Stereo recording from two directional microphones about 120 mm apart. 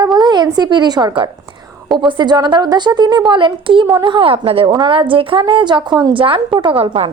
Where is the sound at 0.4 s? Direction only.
35° right (ahead or behind).